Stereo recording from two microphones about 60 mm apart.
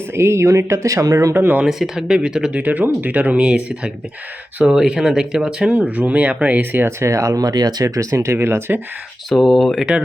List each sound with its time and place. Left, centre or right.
0.1 s speech: right
1.3 s speech: right
1.6 s speech: centre
2.6 s speech: right
5.7 s speech: right
7.0 s speech: right
8.1 s speech: right
9.3 s speech: centre